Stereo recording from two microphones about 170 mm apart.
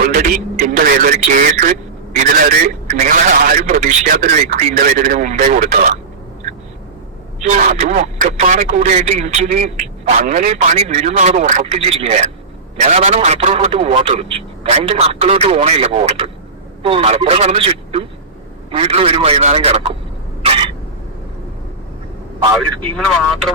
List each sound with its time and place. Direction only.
0.0 s a man's voice: 55° right (ahead or behind)
7.4 s a man's voice: 45° right (ahead or behind)
20.4 s cough: 35° right (ahead or behind)
22.8 s speech: 5° left (ahead or behind)